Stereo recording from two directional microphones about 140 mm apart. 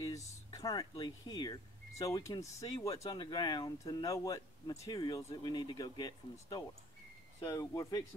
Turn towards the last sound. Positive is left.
turn(degrees=25)  # may be behind; listen again after turning